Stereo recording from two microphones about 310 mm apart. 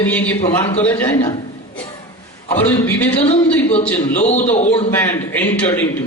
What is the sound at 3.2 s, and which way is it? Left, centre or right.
A man's voice, centre.